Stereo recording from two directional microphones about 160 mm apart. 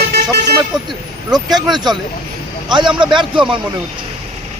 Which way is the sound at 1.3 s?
25° right (ahead or behind).